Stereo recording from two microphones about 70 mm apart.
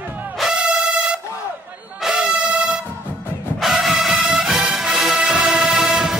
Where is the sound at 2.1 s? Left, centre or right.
Centre.